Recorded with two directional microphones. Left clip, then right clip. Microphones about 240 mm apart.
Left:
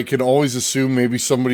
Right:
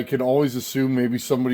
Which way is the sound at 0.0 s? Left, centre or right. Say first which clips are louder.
Left 4 dB; left.